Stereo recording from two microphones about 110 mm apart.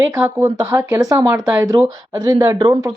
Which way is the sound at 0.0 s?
25° right (ahead or behind).